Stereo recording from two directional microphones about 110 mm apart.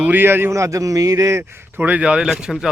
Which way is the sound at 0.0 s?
20° right (ahead or behind).